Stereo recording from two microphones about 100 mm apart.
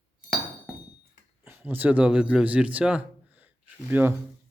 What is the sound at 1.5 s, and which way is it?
Speech, 20° right (ahead or behind).